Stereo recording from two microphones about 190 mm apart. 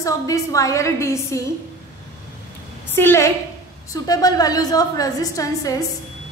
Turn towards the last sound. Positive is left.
turn(degrees=20)  # may be behind; listen again after turning